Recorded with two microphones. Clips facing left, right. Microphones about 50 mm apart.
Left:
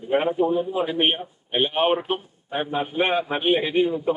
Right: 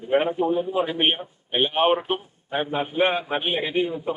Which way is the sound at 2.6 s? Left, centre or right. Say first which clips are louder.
Left 1 dB; right.